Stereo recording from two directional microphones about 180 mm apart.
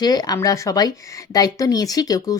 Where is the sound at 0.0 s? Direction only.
20° left (ahead or behind).